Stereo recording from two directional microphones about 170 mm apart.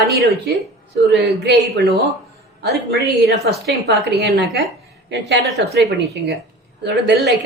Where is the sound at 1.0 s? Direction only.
80° right.